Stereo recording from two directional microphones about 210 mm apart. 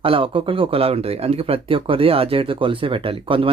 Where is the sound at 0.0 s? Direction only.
25° right (ahead or behind).